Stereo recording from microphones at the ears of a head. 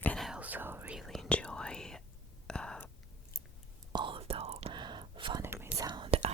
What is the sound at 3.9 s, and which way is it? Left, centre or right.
Whispering, right.